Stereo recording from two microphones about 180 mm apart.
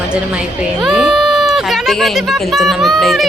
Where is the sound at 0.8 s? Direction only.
Centre (ahead or behind).